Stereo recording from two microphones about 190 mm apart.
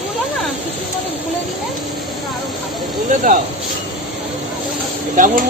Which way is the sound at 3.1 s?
45° right (ahead or behind).